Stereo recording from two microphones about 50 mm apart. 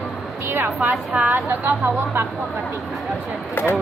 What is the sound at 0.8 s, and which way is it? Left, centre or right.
A woman's voice, right.